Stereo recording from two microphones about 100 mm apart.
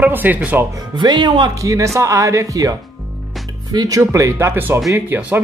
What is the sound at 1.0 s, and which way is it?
A man's voice, 45° right (ahead or behind).